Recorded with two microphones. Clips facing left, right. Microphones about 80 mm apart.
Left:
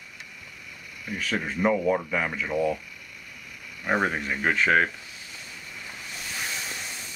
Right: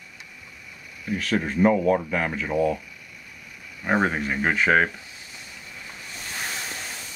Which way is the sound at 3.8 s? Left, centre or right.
Centre.